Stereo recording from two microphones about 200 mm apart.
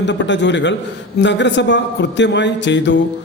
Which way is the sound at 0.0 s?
60° left (ahead or behind).